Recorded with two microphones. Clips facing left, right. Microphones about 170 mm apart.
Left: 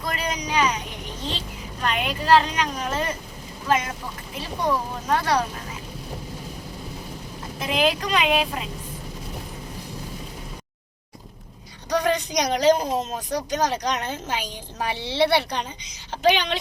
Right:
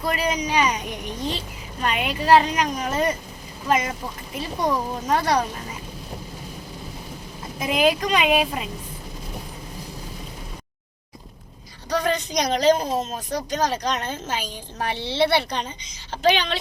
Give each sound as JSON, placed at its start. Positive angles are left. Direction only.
{"t": 0.0, "sound": "speech", "side_deg": -5}
{"t": 1.8, "sound": "speech", "side_deg": -10}
{"t": 4.6, "sound": "speech", "side_deg": -10}
{"t": 7.7, "sound": "speech", "side_deg": -10}
{"t": 11.9, "sound": "speech", "side_deg": 15}